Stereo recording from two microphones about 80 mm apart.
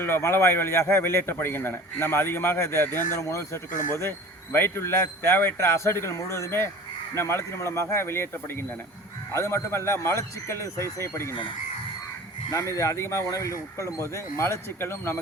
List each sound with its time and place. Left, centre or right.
0.0 s a man's voice: left
9.3 s speech: left
12.5 s speech: left